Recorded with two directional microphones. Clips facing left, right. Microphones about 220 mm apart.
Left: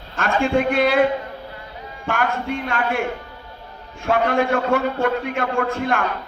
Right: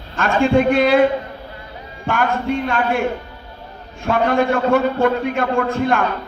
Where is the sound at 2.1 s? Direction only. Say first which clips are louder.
Right 4 dB; 35° right (ahead or behind).